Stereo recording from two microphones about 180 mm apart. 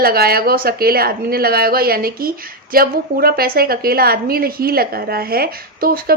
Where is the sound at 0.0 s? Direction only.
55° right (ahead or behind).